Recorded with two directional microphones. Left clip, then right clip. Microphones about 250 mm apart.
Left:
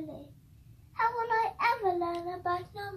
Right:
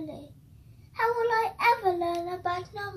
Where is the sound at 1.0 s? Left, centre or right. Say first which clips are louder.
Right 3 dB; right.